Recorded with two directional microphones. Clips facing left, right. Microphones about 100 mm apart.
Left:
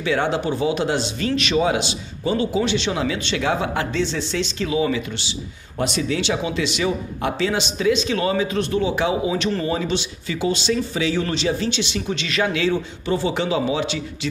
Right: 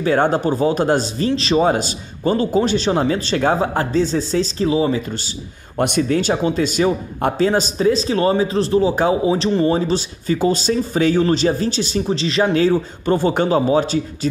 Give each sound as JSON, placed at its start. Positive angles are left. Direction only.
{"t": 0.0, "sound": "speech", "side_deg": -45}
{"t": 5.8, "sound": "speech", "side_deg": -50}